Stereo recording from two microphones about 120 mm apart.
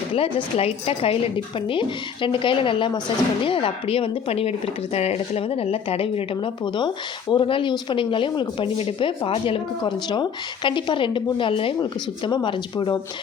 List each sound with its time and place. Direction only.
0.1 s speech: 50° left (ahead or behind)